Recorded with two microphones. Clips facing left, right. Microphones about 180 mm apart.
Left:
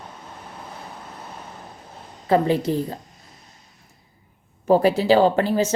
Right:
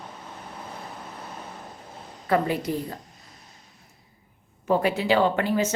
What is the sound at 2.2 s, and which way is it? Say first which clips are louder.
Speech: left 5 dB; 25° left (ahead or behind).